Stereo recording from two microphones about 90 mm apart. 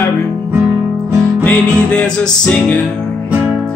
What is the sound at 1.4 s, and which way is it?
Music, 15° left (ahead or behind).